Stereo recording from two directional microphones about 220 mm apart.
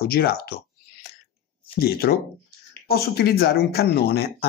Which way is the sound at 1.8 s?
45° left (ahead or behind).